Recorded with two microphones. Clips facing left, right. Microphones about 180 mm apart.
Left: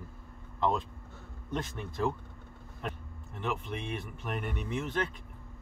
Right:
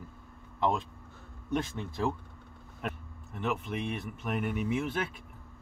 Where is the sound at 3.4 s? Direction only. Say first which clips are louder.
Right 3 dB; 5° right (ahead or behind).